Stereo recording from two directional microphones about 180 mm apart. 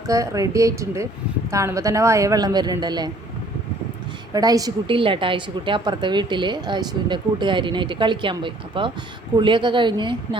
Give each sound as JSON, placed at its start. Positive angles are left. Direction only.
{"t": 0.1, "sound": "speech", "side_deg": -20}
{"t": 4.3, "sound": "a woman's voice", "side_deg": -20}